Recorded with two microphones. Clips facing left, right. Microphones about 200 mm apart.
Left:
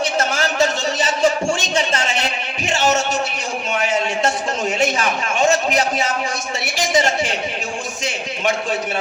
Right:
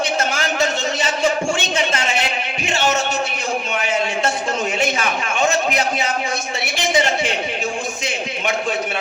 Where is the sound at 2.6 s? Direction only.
40° left (ahead or behind).